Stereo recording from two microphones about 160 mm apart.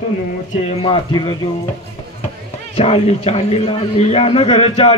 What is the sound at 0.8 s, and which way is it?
Speech, 35° left (ahead or behind).